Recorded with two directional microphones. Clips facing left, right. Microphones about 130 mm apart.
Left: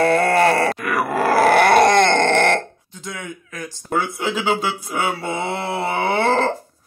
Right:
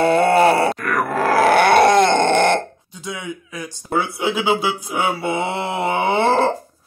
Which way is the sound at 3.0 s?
10° right (ahead or behind).